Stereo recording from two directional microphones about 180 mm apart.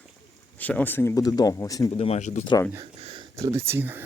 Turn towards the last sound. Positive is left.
turn(degrees=-10)  # may be behind; listen again after turning